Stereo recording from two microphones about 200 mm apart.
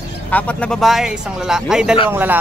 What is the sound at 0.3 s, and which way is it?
A man's voice, 5° left (ahead or behind).